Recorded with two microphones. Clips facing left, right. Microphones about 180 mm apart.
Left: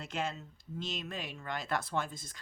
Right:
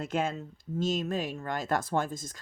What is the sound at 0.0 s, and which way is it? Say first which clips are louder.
Speech: right 7 dB; 50° right (ahead or behind).